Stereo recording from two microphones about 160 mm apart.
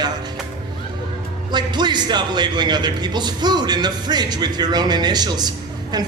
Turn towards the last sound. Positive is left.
turn(degrees=-25)  # may be behind; listen again after turning